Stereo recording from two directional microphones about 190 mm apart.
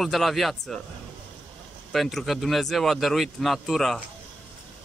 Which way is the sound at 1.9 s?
Centre (ahead or behind).